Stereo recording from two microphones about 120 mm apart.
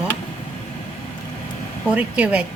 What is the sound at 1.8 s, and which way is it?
Speech, 10° right (ahead or behind).